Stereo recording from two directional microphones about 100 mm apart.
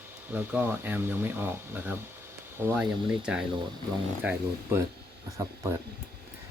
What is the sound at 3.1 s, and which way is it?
Speech, 10° right (ahead or behind).